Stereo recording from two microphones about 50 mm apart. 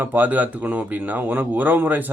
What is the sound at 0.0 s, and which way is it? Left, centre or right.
Speech, right.